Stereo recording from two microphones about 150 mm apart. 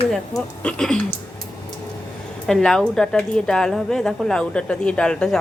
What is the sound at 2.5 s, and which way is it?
A woman's voice, 5° left (ahead or behind).